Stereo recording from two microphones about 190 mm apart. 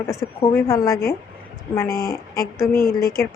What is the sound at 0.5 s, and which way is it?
A woman's voice, 15° left (ahead or behind).